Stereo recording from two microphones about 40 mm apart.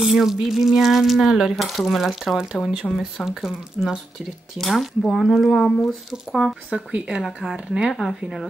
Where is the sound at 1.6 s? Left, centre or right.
Centre.